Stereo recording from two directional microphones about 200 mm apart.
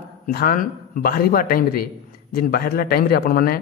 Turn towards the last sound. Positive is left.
turn(degrees=50)  # may be behind; listen again after turning